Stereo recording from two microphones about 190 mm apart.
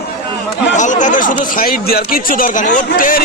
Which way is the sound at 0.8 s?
40° left (ahead or behind).